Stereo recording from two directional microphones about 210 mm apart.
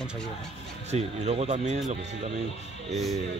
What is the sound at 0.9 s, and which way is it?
Speech, 30° right (ahead or behind).